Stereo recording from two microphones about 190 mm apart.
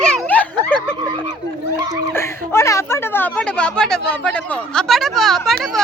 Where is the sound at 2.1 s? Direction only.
15° left (ahead or behind).